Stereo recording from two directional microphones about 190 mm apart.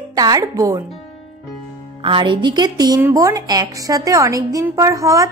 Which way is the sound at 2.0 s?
25° right (ahead or behind).